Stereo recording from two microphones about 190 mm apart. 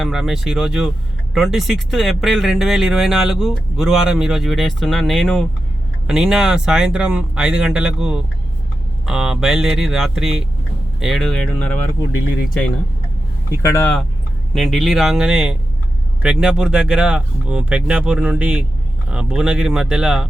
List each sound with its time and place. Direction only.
0.0 s speech: centre (ahead or behind)
13.6 s speech: 15° left (ahead or behind); by 20.2 s 5° right (ahead or behind)